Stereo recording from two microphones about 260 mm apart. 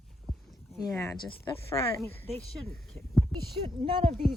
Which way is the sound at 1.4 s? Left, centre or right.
Centre.